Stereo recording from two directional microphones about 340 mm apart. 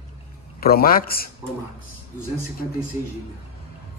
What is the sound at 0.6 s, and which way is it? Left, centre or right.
Speech, left.